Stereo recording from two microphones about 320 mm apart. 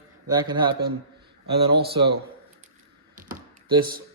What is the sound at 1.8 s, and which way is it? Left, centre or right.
Speech, right.